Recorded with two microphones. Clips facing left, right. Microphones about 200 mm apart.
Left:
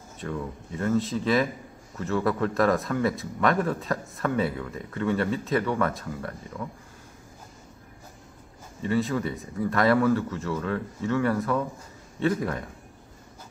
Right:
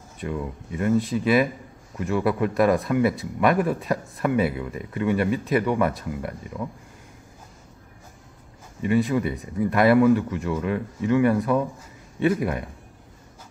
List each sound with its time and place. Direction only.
0.2 s speech: 10° right (ahead or behind)
8.8 s speech: 15° right (ahead or behind)